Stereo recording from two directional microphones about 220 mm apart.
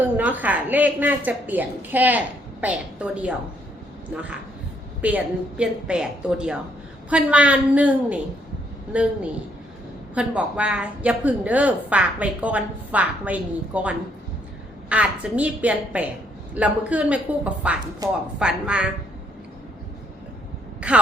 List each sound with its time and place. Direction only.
0.0 s a woman's voice: 5° right (ahead or behind)
10.2 s a woman's voice: 5° right (ahead or behind)
18.0 s a woman's voice: 15° right (ahead or behind)
18.3 s a woman's voice: 5° right (ahead or behind)
20.8 s a woman's voice: 5° right (ahead or behind)